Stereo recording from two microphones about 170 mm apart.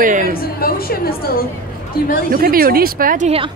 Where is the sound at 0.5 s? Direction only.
60° left (ahead or behind).